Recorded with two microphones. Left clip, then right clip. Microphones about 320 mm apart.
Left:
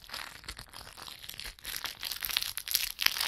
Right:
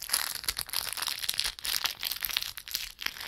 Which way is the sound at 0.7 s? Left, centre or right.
Right.